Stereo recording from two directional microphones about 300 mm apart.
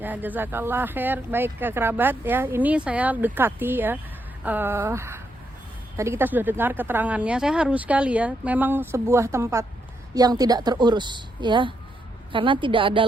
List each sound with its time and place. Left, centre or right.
0.0 s speech: centre